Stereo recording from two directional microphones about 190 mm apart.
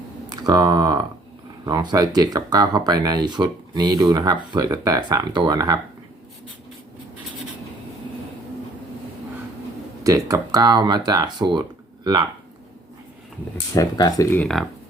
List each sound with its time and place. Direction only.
0.3 s speech: 20° right (ahead or behind)
10.0 s speech: 20° right (ahead or behind)
13.7 s speech: 20° left (ahead or behind); by 14.7 s centre (ahead or behind)